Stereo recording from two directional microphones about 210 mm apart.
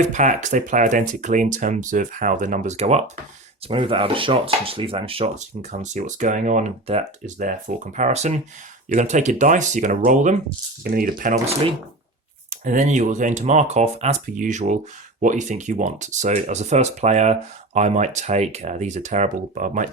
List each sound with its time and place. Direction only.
0.0 s speech: 35° right (ahead or behind)